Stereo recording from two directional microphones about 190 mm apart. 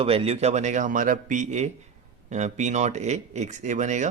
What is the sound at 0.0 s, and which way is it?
Speech, 30° right (ahead or behind).